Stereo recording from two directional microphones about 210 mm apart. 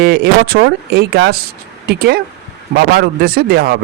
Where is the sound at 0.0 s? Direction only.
45° right (ahead or behind).